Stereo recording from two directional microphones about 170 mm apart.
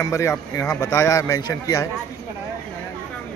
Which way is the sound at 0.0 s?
20° left (ahead or behind).